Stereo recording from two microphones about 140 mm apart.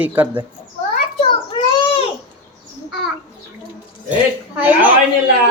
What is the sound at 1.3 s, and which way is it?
Child singing, 35° left (ahead or behind).